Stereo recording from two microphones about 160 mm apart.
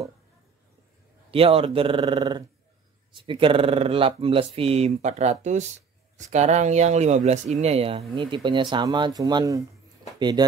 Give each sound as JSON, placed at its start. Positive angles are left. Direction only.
{"t": 1.3, "sound": "speech", "side_deg": -35}